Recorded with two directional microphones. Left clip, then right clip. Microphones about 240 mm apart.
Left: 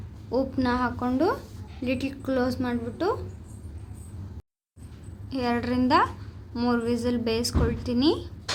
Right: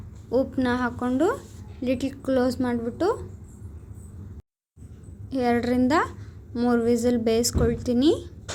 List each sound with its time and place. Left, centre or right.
0.3 s a woman's voice: centre
5.3 s a woman's voice: centre